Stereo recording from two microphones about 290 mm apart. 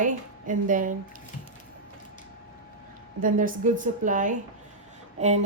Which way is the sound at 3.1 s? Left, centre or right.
Right.